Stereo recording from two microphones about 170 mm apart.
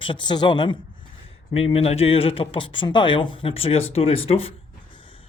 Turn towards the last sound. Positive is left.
turn(degrees=35)  # may be behind; listen again after turning